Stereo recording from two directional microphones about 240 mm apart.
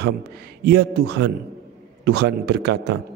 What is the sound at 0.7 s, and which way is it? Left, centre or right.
A man's voice, right.